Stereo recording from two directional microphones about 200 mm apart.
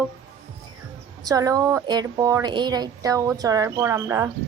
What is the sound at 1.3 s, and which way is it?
A woman's voice, 15° right (ahead or behind).